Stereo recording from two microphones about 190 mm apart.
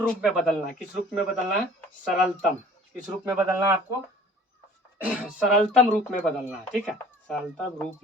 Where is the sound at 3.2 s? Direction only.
10° right (ahead or behind).